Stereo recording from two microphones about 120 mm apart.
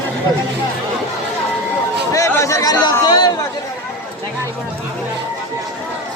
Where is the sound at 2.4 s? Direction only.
25° left (ahead or behind).